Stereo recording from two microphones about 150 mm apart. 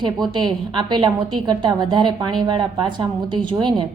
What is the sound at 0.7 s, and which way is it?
A woman's voice, 30° right (ahead or behind).